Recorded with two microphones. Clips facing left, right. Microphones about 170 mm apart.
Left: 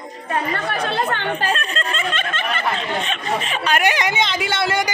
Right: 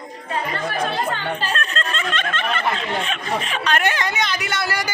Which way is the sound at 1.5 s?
10° left (ahead or behind).